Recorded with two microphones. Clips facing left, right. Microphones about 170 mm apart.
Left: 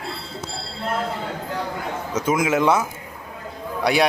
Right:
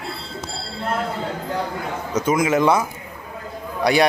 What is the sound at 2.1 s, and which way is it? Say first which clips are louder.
Speech: right 2 dB; 5° left (ahead or behind).